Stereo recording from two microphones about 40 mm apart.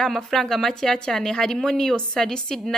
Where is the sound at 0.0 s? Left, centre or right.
Centre.